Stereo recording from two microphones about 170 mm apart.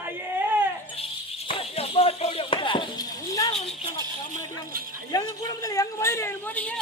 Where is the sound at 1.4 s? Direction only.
35° left (ahead or behind).